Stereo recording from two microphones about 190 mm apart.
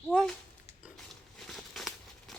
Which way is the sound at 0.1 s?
5° left (ahead or behind).